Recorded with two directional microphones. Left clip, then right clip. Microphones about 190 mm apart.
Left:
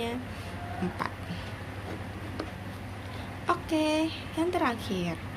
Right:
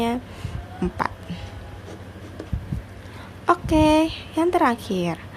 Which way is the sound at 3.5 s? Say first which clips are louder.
Right 10 dB; 55° right (ahead or behind).